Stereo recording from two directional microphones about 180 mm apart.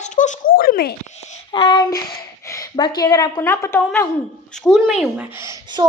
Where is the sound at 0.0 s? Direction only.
45° left (ahead or behind).